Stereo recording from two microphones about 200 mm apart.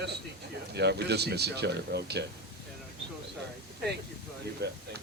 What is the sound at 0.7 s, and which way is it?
Speech, 55° right (ahead or behind).